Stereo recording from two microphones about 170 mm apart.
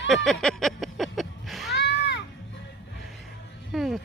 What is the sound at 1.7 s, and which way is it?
Music, 85° left.